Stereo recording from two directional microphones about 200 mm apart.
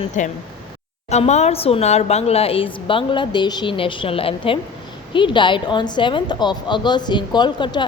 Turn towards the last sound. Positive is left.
turn(degrees=20)  # may be behind; listen again after turning